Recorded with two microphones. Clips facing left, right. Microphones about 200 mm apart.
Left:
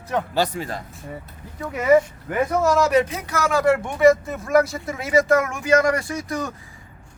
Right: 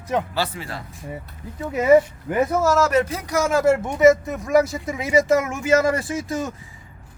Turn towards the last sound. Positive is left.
turn(degrees=-20)  # may be behind; listen again after turning